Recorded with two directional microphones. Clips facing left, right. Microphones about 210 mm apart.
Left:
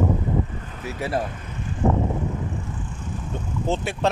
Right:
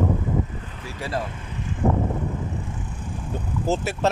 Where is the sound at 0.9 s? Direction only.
25° left (ahead or behind).